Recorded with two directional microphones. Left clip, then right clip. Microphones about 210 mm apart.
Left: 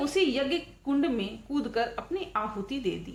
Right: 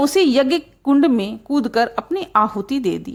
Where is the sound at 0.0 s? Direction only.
45° right (ahead or behind).